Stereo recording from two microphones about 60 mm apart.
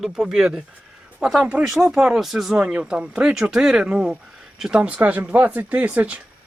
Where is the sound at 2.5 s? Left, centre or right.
Centre.